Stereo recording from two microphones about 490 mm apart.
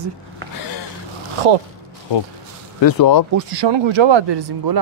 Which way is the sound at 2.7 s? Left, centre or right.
Left.